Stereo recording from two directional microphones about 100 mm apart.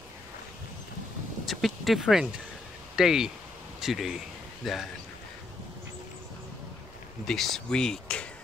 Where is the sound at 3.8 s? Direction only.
5° right (ahead or behind).